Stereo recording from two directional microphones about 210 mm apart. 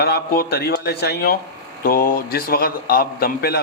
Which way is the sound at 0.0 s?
50° left (ahead or behind).